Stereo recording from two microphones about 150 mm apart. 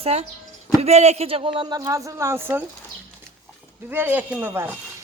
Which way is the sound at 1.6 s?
25° right (ahead or behind).